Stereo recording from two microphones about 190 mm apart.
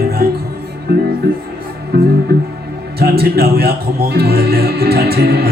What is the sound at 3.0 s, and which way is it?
Speech, 55° right (ahead or behind).